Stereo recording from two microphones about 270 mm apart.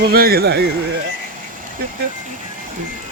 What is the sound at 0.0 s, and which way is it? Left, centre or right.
Speech, right.